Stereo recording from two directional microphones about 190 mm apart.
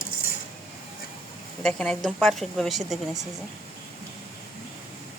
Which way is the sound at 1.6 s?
5° left (ahead or behind).